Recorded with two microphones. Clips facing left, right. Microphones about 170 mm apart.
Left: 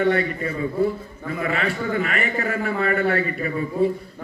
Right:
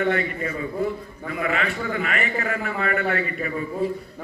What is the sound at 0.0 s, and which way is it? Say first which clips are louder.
A man's voice: left 3 dB; 40° left (ahead or behind).